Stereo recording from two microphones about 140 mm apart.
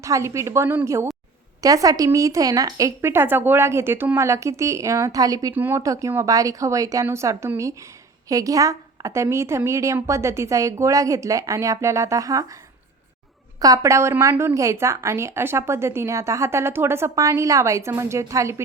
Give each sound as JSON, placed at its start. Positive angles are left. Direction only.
{"t": 0.0, "sound": "a woman's voice", "side_deg": -20}
{"t": 13.6, "sound": "a woman's voice", "side_deg": -25}